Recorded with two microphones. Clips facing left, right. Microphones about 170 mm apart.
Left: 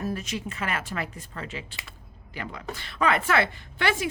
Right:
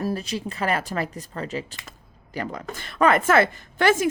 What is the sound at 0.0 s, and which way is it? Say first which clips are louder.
Speech: right 4 dB; 35° right (ahead or behind).